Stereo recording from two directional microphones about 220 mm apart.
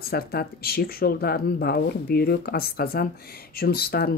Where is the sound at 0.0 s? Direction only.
45° left (ahead or behind).